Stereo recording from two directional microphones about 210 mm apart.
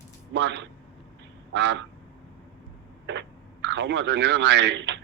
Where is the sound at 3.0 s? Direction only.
60° right (ahead or behind).